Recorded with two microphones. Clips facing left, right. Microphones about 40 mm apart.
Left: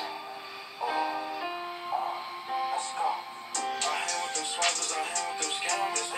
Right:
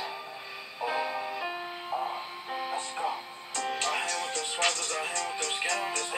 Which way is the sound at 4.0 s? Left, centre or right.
Centre.